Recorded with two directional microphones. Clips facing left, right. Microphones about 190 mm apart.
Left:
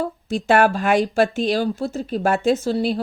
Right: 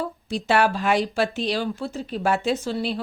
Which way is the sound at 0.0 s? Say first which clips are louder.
Left 4 dB; 50° left (ahead or behind).